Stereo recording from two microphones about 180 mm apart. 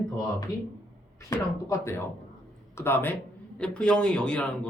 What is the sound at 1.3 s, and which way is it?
Speech, 15° left (ahead or behind).